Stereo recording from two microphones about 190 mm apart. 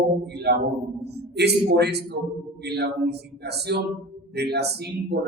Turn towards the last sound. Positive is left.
turn(degrees=-60)  # may be behind; listen again after turning